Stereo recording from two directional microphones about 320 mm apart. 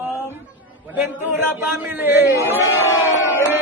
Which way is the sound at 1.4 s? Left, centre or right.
Centre.